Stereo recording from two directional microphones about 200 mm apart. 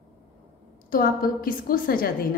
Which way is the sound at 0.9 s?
45° left (ahead or behind).